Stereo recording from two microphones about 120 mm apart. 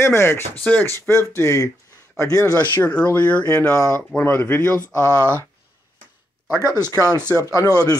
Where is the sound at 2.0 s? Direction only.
25° left (ahead or behind).